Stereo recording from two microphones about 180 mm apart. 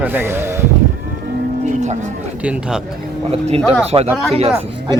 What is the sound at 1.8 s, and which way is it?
Speech, 40° right (ahead or behind).